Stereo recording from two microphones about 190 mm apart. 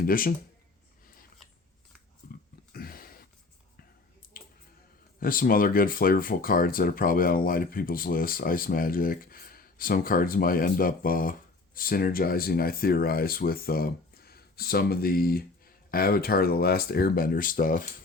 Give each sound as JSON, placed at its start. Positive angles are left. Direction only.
{"t": 0.0, "sound": "speech", "side_deg": 50}
{"t": 2.7, "sound": "a sound", "side_deg": 50}
{"t": 5.2, "sound": "speech", "side_deg": 50}